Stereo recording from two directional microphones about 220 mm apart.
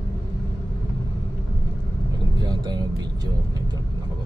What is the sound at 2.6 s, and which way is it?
Speech, 20° right (ahead or behind).